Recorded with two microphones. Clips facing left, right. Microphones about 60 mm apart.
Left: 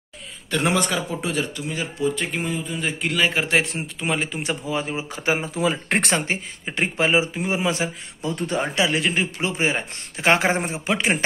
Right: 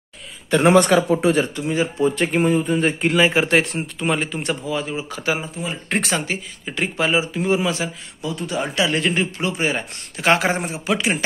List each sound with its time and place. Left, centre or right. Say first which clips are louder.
0.5 s a man's voice: right 7 dB; right
0.7 s speech: right 9 dB; right
1.3 s speech: right 6 dB; right
2.2 s speech: right 9 dB; right
3.4 s a man's voice: right 3 dB; centre
4.6 s speech: right 1 dB; left
5.5 s speech: left 6 dB; left
5.9 s speech: even; left
6.1 s speech: even; left
8.3 s speech: left 1 dB; left
8.6 s speech: right 2 dB; left
8.9 s speech: right 2 dB; centre
9.4 s speech: right 1 dB; left